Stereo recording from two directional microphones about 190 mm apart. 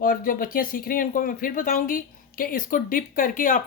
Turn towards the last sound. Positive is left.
turn(degrees=45)  # may be behind; listen again after turning